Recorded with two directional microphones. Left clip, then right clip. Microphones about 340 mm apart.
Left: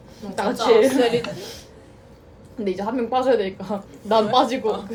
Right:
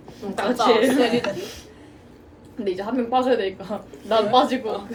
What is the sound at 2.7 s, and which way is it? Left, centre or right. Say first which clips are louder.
Speech: even; centre.